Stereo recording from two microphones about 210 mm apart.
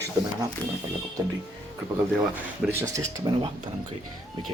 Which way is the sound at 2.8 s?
15° right (ahead or behind).